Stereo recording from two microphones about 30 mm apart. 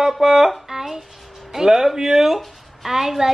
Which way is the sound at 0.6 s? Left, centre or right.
Centre.